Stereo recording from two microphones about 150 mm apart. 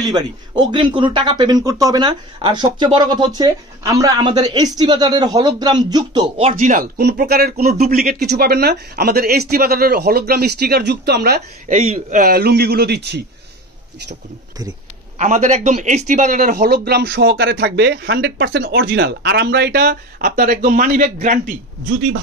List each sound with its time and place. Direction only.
0.0 s speech: 30° right (ahead or behind)
6.6 s speech: 65° right (ahead or behind); by 7.8 s 90° right
7.9 s speech: 80° right
11.7 s a man's voice: 50° right (ahead or behind)
12.2 s speech: 80° right
15.1 s speech: 50° right (ahead or behind)